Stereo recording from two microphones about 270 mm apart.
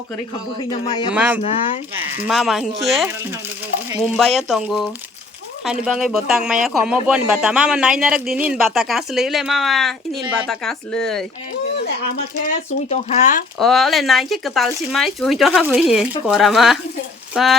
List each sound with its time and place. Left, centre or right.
0.6 s speech: centre
1.1 s speech: centre
1.4 s speech: left
2.2 s speech: centre
4.2 s speech: centre
12.5 s speech: left
13.6 s speech: centre